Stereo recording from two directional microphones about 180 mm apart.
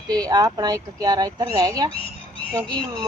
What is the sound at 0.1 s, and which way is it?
Speech, 20° right (ahead or behind).